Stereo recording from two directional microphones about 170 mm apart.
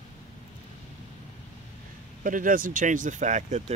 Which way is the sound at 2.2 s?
50° right (ahead or behind).